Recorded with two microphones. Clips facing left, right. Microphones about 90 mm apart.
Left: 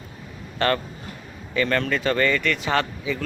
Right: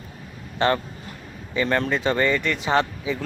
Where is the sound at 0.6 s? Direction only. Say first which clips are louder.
Right 1 dB; 20° right (ahead or behind).